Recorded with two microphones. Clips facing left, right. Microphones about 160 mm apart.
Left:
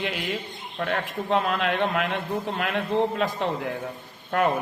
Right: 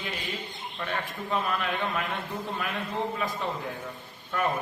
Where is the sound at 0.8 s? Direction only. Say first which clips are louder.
Left 6 dB; 80° left.